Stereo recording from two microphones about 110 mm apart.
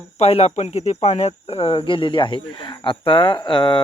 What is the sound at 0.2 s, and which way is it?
Speech, 70° left (ahead or behind).